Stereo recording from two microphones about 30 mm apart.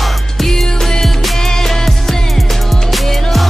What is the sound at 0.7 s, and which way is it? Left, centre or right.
Music, centre.